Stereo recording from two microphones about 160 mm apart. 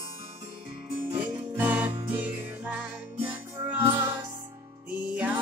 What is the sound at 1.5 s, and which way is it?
Music, 10° right (ahead or behind).